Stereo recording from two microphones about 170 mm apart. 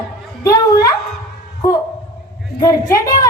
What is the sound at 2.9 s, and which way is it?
Speech, 20° left (ahead or behind).